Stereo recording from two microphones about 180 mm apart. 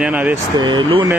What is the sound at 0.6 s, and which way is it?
Speech, 25° right (ahead or behind).